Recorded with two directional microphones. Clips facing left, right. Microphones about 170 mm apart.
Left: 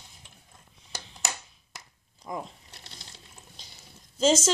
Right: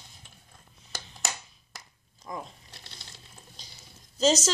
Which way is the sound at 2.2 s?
20° left (ahead or behind).